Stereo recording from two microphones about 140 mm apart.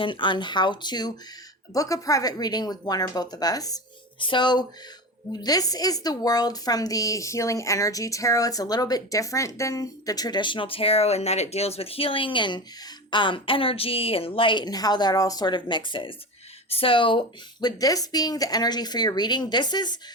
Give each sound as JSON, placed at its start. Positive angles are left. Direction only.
{"t": 0.0, "sound": "a woman's voice", "side_deg": 35}